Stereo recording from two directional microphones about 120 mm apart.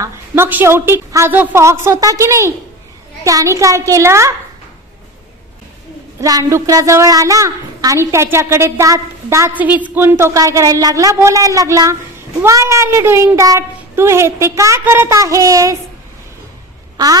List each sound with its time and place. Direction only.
0.0 s speech: 20° right (ahead or behind)
6.2 s speech: 30° right (ahead or behind)
9.5 s a woman's voice: 15° right (ahead or behind)
16.9 s speech: 30° right (ahead or behind)